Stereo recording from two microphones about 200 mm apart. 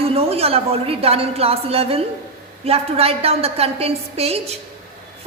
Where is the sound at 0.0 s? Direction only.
30° right (ahead or behind).